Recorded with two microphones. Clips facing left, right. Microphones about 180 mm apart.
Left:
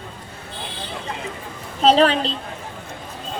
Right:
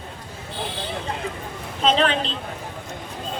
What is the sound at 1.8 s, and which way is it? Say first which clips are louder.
Speech: left 5 dB; 35° left (ahead or behind).